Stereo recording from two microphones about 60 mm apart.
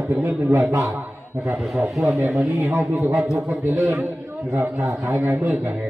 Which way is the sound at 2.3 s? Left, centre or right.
Right.